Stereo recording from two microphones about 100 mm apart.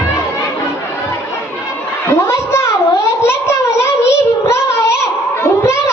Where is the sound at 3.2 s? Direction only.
25° left (ahead or behind).